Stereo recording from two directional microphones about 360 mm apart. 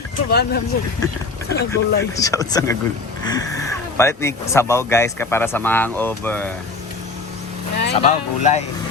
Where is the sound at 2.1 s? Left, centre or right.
Centre.